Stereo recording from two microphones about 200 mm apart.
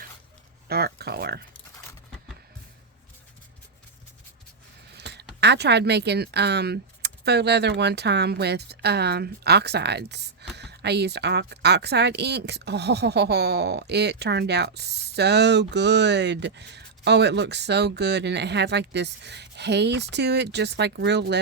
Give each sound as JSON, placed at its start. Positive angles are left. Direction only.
{"t": 0.7, "sound": "speech", "side_deg": -50}
{"t": 4.9, "sound": "speech", "side_deg": -55}